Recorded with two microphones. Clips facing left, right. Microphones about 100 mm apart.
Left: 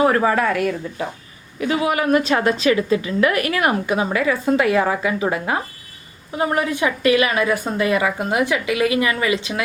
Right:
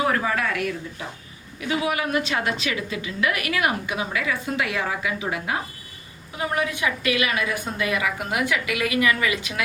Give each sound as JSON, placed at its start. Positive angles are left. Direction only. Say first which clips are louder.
{"t": 0.0, "sound": "a woman's voice", "louder": "left 7 dB", "side_deg": 40}